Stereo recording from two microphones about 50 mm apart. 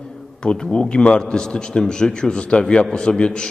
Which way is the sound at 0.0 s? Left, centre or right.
Centre.